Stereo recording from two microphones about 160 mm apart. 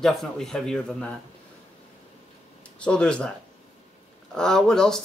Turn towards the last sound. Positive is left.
turn(degrees=5)  # may be behind; listen again after turning